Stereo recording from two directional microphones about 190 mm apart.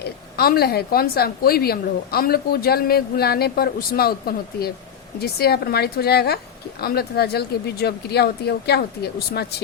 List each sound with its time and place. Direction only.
0.0 s a woman's voice: 55° left (ahead or behind)